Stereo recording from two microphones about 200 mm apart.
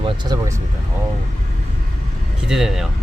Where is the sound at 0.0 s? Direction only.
20° right (ahead or behind).